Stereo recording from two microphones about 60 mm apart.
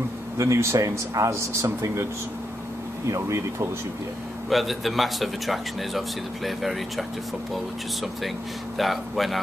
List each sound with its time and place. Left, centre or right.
0.4 s a man's voice: right
3.1 s a man's voice: right
4.5 s speech: centre